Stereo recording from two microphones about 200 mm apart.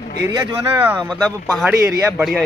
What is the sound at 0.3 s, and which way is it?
Speech, 20° right (ahead or behind).